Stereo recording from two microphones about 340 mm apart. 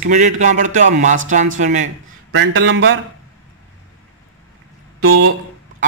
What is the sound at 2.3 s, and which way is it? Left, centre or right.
Speech, right.